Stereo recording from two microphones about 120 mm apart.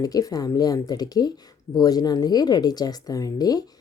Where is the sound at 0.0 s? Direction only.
30° left (ahead or behind).